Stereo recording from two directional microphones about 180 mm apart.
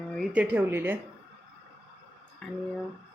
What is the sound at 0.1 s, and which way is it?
Speech, 5° right (ahead or behind).